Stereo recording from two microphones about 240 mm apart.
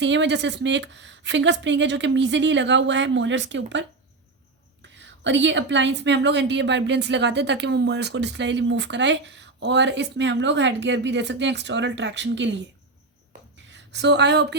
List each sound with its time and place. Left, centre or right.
0.0 s a woman's voice: right
4.9 s a woman's voice: right
13.7 s a sound: right